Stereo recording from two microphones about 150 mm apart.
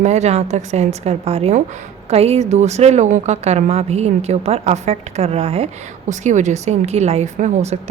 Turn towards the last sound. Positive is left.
turn(degrees=-50)  # may be behind; listen again after turning